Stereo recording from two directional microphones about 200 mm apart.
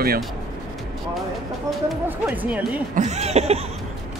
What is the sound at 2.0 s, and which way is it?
Speech, 10° right (ahead or behind).